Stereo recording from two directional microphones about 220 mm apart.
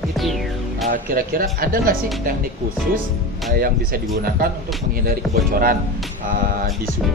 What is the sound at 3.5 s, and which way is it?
Speech, 40° right (ahead or behind).